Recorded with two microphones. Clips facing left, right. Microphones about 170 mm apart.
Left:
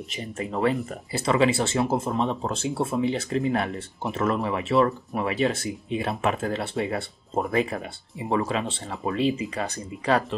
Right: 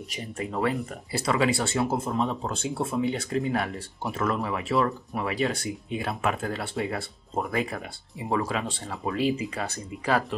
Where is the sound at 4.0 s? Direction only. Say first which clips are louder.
Left 2 dB; 20° left (ahead or behind).